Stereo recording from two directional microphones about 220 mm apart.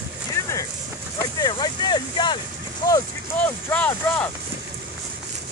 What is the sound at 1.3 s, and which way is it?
Speech, 20° left (ahead or behind).